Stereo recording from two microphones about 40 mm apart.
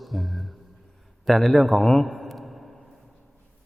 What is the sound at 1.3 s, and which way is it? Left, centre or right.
A man's voice, centre.